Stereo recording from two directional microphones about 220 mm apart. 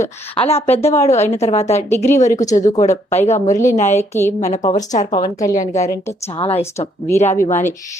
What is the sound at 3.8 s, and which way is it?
Speech, 10° left (ahead or behind).